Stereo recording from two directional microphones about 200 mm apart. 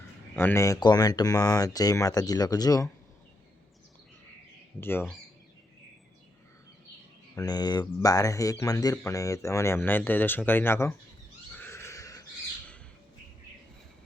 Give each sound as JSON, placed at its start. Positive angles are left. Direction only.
{"t": 0.3, "sound": "speech", "side_deg": 10}
{"t": 4.8, "sound": "speech", "side_deg": 10}
{"t": 7.3, "sound": "speech", "side_deg": 20}
{"t": 11.5, "sound": "horse", "side_deg": 10}